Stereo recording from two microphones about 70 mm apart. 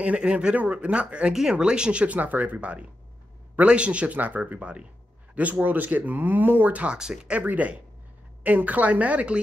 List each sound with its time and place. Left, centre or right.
0.0 s speech: centre
7.0 s speech: centre
7.3 s speech: right